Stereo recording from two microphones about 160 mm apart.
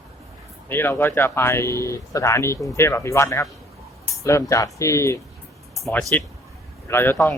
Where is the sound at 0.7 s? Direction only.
15° left (ahead or behind).